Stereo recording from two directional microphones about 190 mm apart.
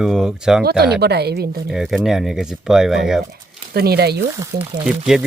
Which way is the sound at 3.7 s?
55° right (ahead or behind).